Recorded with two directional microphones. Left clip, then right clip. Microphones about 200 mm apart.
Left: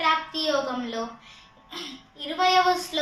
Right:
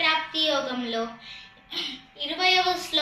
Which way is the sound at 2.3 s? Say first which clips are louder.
Left 2 dB; 15° left (ahead or behind).